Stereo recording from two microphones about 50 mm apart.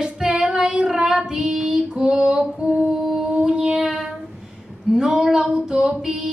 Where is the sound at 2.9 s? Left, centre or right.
Centre.